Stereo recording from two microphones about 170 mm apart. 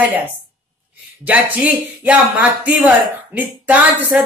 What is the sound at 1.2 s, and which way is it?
Speech, 10° right (ahead or behind).